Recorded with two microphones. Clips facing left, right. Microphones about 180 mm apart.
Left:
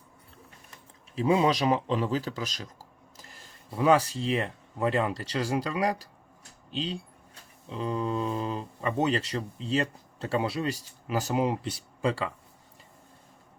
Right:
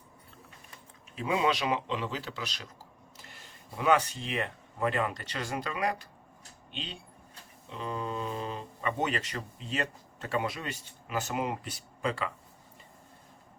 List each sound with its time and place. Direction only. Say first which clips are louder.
1.1 s speech: left 5 dB; 35° left (ahead or behind)